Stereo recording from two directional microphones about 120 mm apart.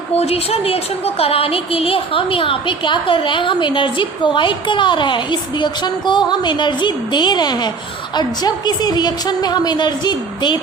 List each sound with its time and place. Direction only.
0.1 s a woman's voice: 60° left (ahead or behind); by 10.6 s 35° left (ahead or behind)